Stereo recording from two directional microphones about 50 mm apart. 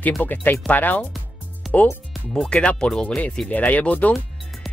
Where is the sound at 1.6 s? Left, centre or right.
Centre.